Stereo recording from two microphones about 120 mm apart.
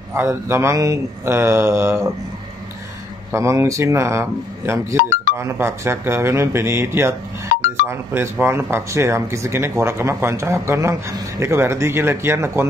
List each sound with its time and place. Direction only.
0.1 s speech: 20° right (ahead or behind)
3.3 s speech: 25° right (ahead or behind)